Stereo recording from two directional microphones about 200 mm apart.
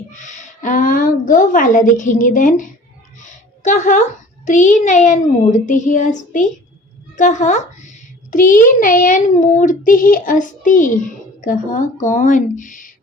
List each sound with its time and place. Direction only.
0.2 s a child's voice: 40° left (ahead or behind)
3.2 s a sound: 40° left (ahead or behind)
4.4 s a child's voice: 40° left (ahead or behind)